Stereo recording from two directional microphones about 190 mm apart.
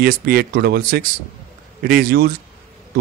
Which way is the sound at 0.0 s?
50° right (ahead or behind).